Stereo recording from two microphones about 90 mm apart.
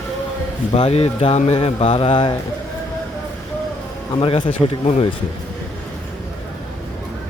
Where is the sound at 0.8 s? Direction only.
90° left.